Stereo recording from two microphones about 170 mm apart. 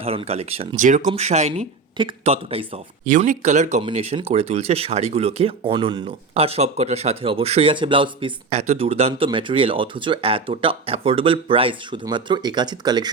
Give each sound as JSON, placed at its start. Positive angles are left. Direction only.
{"t": 0.0, "sound": "speech", "side_deg": -35}
{"t": 0.8, "sound": "speech", "side_deg": -45}
{"t": 3.1, "sound": "speech", "side_deg": -45}